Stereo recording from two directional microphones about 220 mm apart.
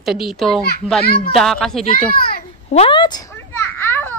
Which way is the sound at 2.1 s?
40° left (ahead or behind).